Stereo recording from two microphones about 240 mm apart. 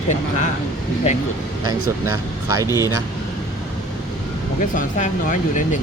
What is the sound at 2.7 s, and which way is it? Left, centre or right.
Speech, centre.